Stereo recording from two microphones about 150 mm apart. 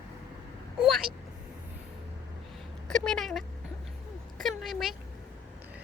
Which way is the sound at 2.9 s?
5° left (ahead or behind).